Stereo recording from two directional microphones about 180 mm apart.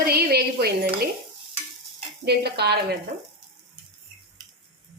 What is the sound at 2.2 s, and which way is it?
Dishes, 65° right (ahead or behind).